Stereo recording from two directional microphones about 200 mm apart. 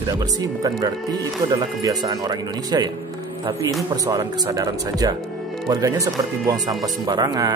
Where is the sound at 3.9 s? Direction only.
20° right (ahead or behind).